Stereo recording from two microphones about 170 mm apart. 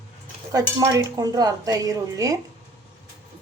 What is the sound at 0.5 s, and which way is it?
Speech, 20° right (ahead or behind).